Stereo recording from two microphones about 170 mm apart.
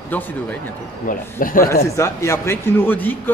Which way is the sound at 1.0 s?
55° left (ahead or behind).